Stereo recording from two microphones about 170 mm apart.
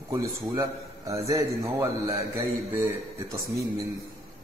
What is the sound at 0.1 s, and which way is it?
A man's voice, 15° right (ahead or behind).